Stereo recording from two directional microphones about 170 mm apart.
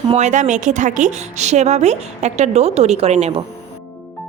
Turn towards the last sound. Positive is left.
turn(degrees=-40)  # may be behind; listen again after turning